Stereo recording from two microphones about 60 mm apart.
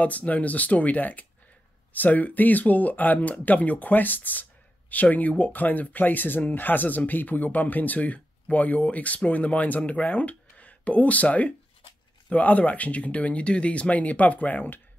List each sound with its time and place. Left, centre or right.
0.0 s speech: left